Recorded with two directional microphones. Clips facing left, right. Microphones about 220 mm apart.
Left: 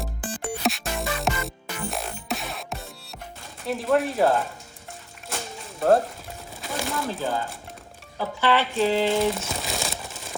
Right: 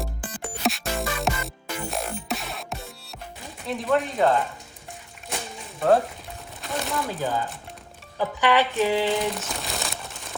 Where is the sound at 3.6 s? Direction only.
Centre (ahead or behind).